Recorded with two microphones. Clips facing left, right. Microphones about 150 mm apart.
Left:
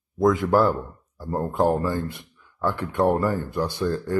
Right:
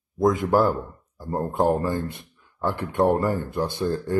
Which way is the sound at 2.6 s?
20° right (ahead or behind).